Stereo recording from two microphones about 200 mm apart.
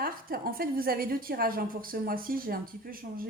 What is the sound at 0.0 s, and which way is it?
Speech, 45° right (ahead or behind).